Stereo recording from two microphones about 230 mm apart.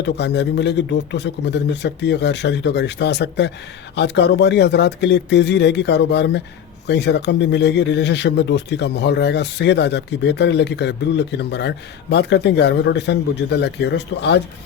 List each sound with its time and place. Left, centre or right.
0.0 s speech: left